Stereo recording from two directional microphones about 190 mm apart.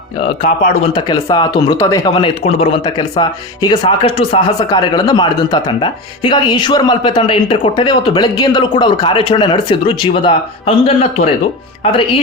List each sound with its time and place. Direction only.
0.2 s speech: 30° left (ahead or behind)
1.0 s a man's voice: 20° left (ahead or behind)
11.8 s a man's voice: 25° left (ahead or behind)